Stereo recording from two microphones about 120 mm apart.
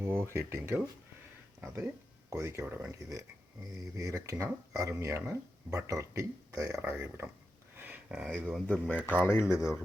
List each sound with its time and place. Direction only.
0.0 s speech: 20° right (ahead or behind)
7.8 s a sound: 15° right (ahead or behind)
8.4 s speech: 5° left (ahead or behind)
9.0 s speech: 20° left (ahead or behind)